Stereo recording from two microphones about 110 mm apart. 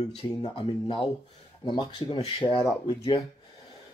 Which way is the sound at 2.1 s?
60° left (ahead or behind).